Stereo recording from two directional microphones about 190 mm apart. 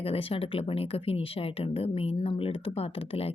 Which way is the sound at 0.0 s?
30° left (ahead or behind).